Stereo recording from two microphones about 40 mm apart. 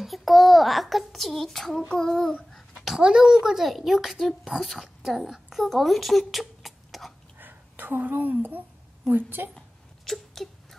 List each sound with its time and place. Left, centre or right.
0.0 s a child's voice: centre
1.9 s child singing: centre
3.0 s speech: centre
3.5 s a woman's voice: centre
7.3 s a sound: right
9.1 s a woman's voice: right
10.0 s a sound: centre